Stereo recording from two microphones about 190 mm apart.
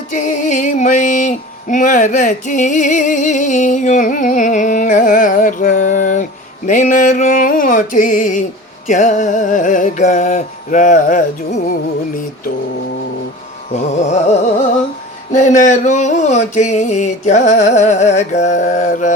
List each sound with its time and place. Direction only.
0.1 s music: 40° left (ahead or behind)
13.7 s music: 40° left (ahead or behind)